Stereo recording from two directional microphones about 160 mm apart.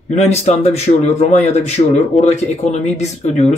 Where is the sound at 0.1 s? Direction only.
45° left (ahead or behind).